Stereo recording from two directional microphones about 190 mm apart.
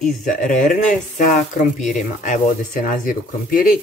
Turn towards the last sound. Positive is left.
turn(degrees=45)  # may be behind; listen again after turning